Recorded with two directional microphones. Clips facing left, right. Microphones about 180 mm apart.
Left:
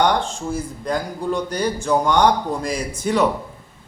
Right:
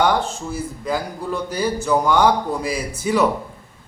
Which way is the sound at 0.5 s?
5° right (ahead or behind).